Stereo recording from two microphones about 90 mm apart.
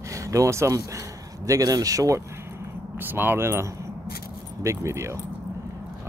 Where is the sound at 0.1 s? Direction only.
35° right (ahead or behind).